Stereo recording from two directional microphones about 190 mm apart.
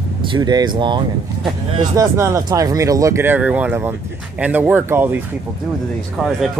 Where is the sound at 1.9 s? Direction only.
15° right (ahead or behind).